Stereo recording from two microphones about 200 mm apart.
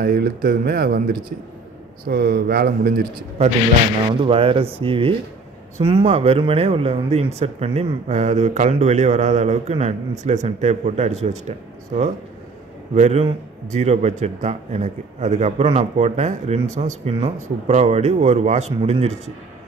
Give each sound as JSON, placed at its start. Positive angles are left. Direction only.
{"t": 0.0, "sound": "speech", "side_deg": -50}
{"t": 4.1, "sound": "speech", "side_deg": -25}